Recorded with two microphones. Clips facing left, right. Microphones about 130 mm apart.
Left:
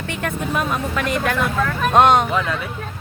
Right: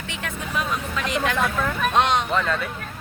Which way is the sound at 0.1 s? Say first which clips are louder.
Left 6 dB; 50° left (ahead or behind).